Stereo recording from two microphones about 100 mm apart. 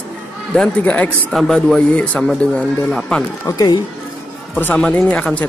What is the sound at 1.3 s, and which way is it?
Speech, centre (ahead or behind).